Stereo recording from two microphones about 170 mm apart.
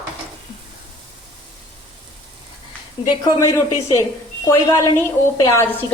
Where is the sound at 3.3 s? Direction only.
20° left (ahead or behind).